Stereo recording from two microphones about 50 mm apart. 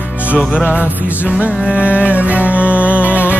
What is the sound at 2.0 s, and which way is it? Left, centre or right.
Music, right.